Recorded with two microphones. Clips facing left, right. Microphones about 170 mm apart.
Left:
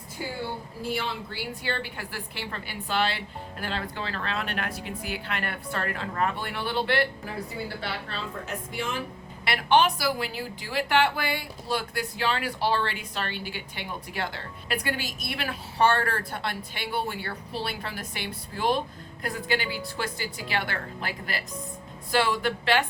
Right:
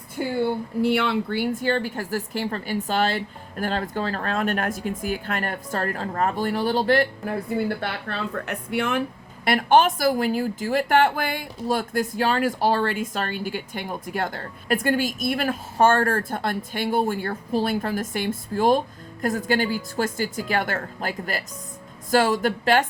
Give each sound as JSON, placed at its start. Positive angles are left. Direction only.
{"t": 0.2, "sound": "a woman's voice", "side_deg": -55}
{"t": 0.8, "sound": "a woman's voice", "side_deg": -65}